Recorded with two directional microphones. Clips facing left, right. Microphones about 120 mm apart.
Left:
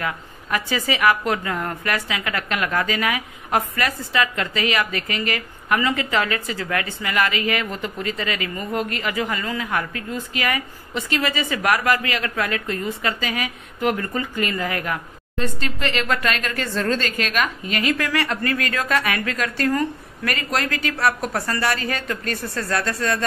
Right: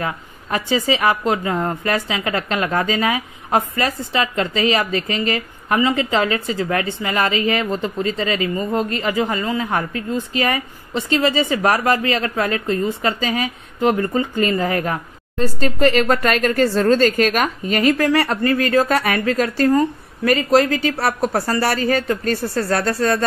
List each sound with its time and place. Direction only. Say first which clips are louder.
0.0 s a woman's voice: right 2 dB; 25° right (ahead or behind)